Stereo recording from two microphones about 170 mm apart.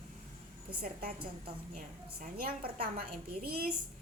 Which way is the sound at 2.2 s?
60° right (ahead or behind).